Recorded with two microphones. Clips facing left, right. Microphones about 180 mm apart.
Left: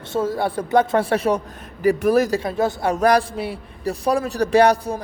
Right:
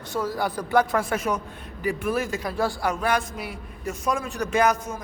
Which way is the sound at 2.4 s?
20° left (ahead or behind).